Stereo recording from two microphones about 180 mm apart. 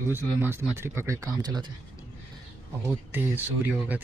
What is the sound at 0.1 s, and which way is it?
Speech, 10° right (ahead or behind).